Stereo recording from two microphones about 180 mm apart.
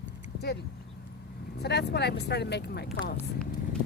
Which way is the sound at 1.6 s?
65° left (ahead or behind).